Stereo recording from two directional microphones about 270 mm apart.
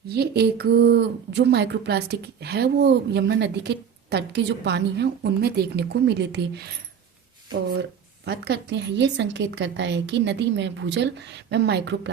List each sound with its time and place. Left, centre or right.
0.1 s speech: right
7.7 s speech: right